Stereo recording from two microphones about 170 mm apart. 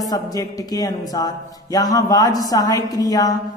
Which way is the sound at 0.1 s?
20° left (ahead or behind).